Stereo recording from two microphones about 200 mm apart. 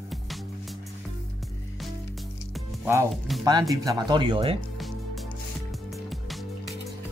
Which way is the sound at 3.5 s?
20° right (ahead or behind).